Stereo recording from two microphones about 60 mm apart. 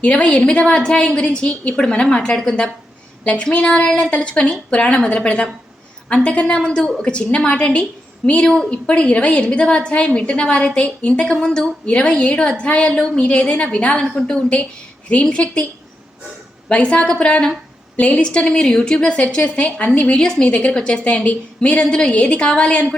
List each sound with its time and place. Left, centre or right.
0.0 s a woman's voice: left
16.6 s a woman's voice: centre